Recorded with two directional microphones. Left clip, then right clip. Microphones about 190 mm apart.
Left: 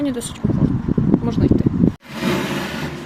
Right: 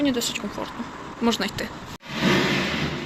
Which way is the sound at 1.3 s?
Centre (ahead or behind).